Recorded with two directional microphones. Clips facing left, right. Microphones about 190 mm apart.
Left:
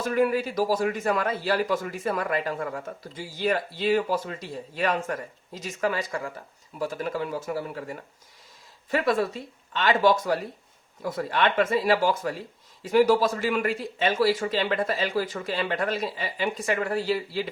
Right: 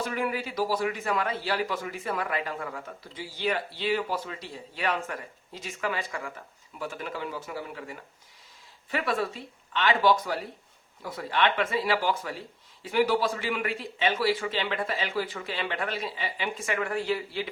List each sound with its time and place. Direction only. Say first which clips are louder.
0.0 s a man's voice: left 7 dB; 45° left (ahead or behind)